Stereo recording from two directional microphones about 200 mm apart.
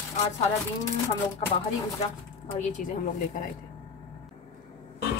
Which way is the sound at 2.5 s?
35° left (ahead or behind).